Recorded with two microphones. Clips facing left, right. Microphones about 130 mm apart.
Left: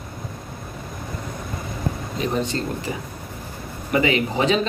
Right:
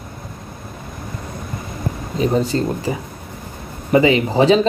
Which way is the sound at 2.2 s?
35° right (ahead or behind).